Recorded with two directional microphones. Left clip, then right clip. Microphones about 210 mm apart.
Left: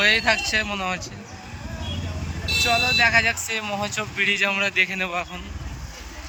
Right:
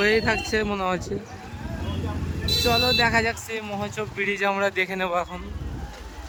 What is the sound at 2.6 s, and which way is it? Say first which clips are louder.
Speech: left 2 dB; 20° right (ahead or behind).